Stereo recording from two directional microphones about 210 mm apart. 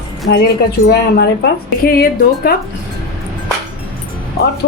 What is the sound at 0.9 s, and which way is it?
A woman's voice, 50° left (ahead or behind).